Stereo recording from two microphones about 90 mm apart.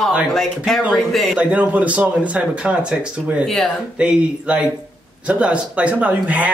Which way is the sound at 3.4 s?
5° left (ahead or behind).